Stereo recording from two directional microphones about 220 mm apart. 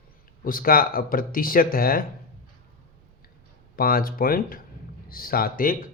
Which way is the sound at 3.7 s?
40° left (ahead or behind).